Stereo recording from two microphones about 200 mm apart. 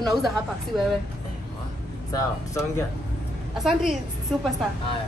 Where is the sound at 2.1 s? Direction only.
15° left (ahead or behind).